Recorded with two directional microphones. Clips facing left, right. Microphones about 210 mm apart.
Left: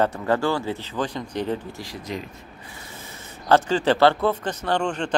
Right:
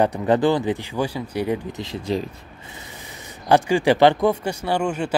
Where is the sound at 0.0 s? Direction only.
15° right (ahead or behind).